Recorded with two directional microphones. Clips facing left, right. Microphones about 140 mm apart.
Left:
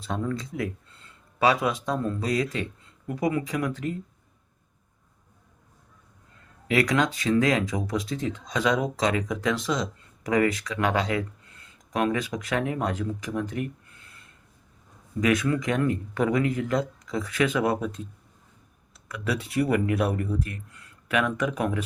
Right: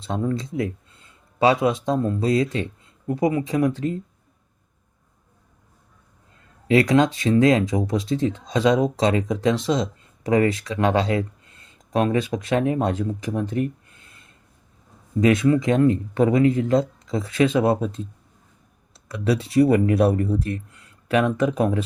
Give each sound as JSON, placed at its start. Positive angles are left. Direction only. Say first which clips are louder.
{"t": 0.0, "sound": "speech", "louder": "right 5 dB", "side_deg": -25}
{"t": 0.9, "sound": "a sound", "louder": "even", "side_deg": -15}
{"t": 1.4, "sound": "speech", "louder": "right 5 dB", "side_deg": -25}
{"t": 6.7, "sound": "speech", "louder": "right 6 dB", "side_deg": -30}
{"t": 15.2, "sound": "speech", "louder": "right 6 dB", "side_deg": -25}